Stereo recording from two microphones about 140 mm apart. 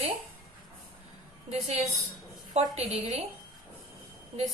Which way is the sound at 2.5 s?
50° right (ahead or behind).